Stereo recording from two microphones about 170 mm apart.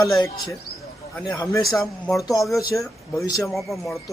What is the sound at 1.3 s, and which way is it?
Speech, 20° left (ahead or behind).